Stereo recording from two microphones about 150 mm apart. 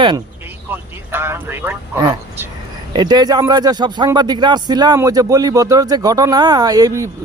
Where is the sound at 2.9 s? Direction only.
30° right (ahead or behind).